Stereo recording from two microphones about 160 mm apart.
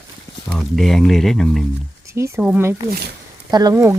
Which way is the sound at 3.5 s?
25° right (ahead or behind).